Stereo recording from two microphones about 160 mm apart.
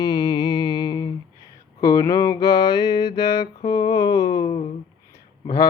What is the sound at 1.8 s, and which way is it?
Mantra, 20° left (ahead or behind).